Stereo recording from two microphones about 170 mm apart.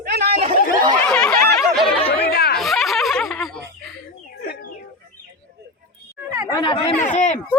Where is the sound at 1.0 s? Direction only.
5° left (ahead or behind).